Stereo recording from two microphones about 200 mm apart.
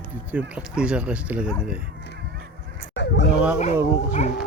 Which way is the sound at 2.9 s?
60° left (ahead or behind).